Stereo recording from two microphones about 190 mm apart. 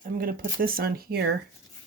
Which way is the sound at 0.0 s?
50° right (ahead or behind).